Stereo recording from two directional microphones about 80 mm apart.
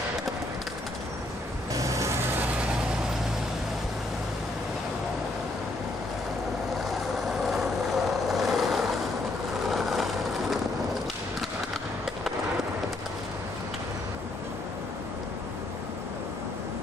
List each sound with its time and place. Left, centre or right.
1.7 s vehicle: right
7.4 s vehicle: centre